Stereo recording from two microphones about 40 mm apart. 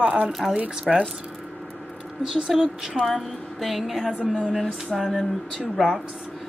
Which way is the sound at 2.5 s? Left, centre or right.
Centre.